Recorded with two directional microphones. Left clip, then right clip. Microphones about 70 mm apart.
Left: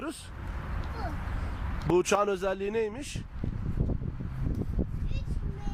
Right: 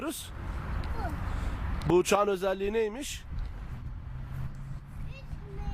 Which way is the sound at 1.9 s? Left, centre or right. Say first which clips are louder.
Right 1 dB; right.